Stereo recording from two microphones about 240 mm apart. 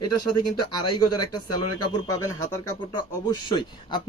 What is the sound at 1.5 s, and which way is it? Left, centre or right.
Speech, left.